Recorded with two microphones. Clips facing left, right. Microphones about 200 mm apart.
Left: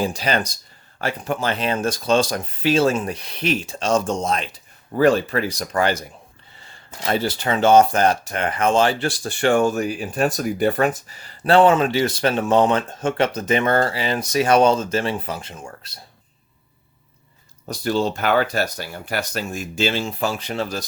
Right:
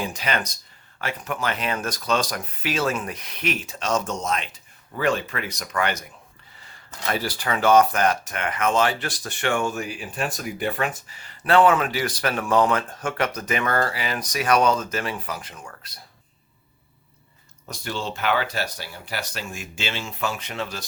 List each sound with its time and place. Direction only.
0.0 s speech: 35° left (ahead or behind)
17.7 s speech: 40° left (ahead or behind)